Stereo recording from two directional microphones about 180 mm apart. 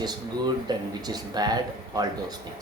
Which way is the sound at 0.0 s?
25° right (ahead or behind).